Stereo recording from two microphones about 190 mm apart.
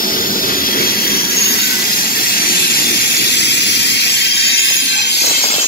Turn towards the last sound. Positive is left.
turn(degrees=65)  # may be behind; listen again after turning